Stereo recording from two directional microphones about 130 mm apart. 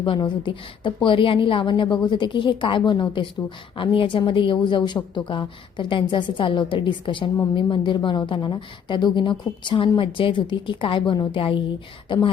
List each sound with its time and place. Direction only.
0.0 s a woman's voice: 40° left (ahead or behind)